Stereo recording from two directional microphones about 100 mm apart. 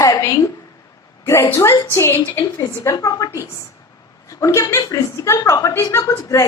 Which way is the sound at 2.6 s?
35° left (ahead or behind).